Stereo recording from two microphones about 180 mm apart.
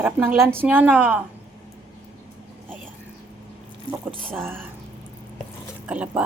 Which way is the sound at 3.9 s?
25° left (ahead or behind).